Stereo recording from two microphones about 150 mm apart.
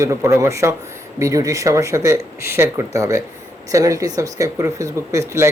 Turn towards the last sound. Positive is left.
turn(degrees=-20)  # may be behind; listen again after turning